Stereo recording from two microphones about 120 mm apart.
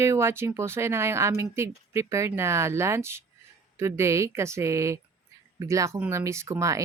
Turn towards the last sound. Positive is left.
turn(degrees=-25)  # may be behind; listen again after turning